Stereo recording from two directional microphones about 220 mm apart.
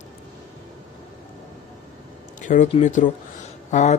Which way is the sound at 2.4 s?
35° left (ahead or behind).